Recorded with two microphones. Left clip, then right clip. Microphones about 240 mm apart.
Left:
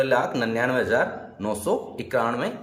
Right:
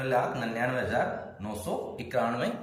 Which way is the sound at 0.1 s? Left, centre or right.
Left.